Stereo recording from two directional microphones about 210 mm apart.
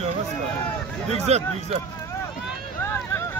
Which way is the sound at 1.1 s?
30° right (ahead or behind).